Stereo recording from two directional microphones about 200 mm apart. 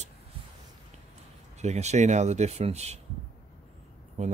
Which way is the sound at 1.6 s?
35° right (ahead or behind).